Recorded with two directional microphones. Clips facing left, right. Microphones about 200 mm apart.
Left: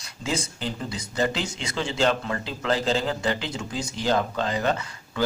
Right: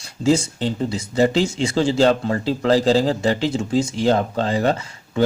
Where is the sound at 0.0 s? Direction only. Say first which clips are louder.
Right 12 dB; 30° right (ahead or behind).